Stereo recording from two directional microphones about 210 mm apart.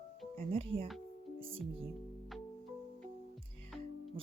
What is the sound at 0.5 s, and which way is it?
Speech, 25° right (ahead or behind).